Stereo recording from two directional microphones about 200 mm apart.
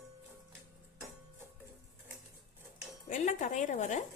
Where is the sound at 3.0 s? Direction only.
40° left (ahead or behind).